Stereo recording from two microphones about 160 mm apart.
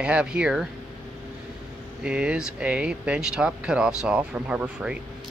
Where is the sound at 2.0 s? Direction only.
5° right (ahead or behind).